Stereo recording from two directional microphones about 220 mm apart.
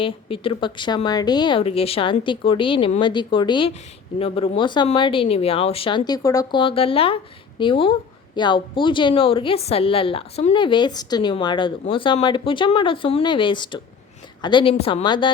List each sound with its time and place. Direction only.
0.0 s a woman's voice: 25° left (ahead or behind)